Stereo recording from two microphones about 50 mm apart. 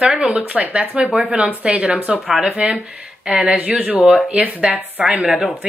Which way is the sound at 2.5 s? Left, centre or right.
Right.